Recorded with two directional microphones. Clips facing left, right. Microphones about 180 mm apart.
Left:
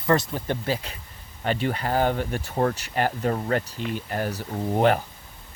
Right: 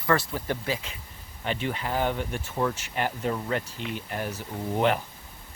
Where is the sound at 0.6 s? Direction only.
35° left (ahead or behind).